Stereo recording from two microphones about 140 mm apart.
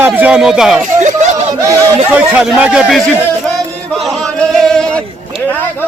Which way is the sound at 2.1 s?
5° right (ahead or behind).